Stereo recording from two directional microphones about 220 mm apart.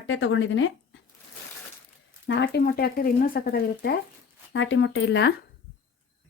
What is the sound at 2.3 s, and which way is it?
Speech, 50° left (ahead or behind).